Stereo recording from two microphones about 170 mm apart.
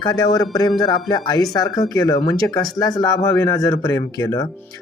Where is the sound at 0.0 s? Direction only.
25° left (ahead or behind).